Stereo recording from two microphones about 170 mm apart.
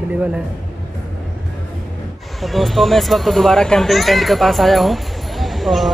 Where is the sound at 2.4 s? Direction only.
Centre (ahead or behind).